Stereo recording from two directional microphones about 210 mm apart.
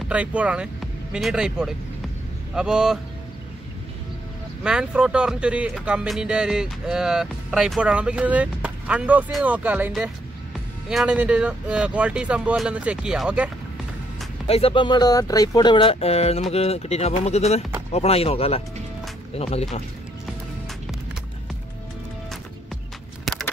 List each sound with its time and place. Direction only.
0.1 s speech: 5° right (ahead or behind)
4.6 s speech: 5° right (ahead or behind)
14.5 s speech: 25° left (ahead or behind)
23.3 s a sound: centre (ahead or behind)